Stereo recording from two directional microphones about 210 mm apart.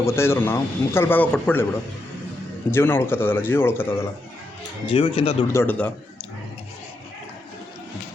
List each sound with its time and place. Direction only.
0.0 s a man's voice: 10° left (ahead or behind)
2.6 s a man's voice: 10° left (ahead or behind)
4.9 s speech: 25° left (ahead or behind)
5.5 s a man's voice: 10° left (ahead or behind)